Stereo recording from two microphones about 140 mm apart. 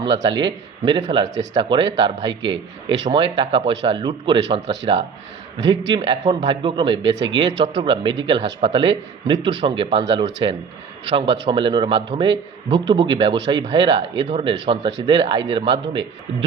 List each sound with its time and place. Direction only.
0.0 s a man's voice: 35° right (ahead or behind)